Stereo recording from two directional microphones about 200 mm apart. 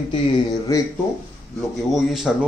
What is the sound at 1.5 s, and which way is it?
Speech, centre (ahead or behind).